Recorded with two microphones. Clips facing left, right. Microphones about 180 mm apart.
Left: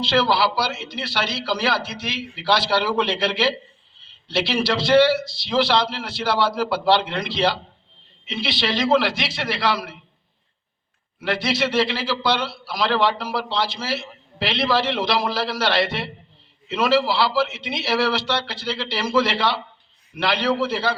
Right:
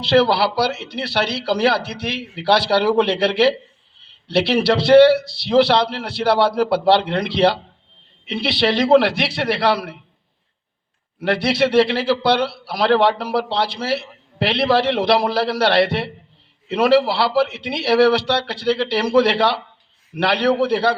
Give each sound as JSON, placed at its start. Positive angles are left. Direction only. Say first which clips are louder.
{"t": 0.1, "sound": "speech", "louder": "right 6 dB", "side_deg": -60}
{"t": 11.2, "sound": "speech", "louder": "right 5 dB", "side_deg": -65}